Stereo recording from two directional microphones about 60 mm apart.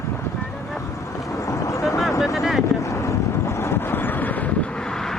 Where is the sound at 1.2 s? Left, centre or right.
Left.